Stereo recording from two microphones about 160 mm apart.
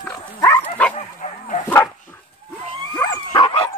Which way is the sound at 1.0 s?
50° left (ahead or behind).